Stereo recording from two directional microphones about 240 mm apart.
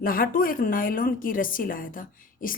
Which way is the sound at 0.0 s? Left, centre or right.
Left.